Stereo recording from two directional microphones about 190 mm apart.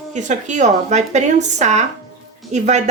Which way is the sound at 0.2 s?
40° right (ahead or behind).